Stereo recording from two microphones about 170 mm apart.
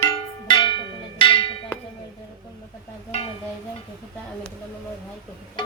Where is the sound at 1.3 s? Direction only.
30° left (ahead or behind).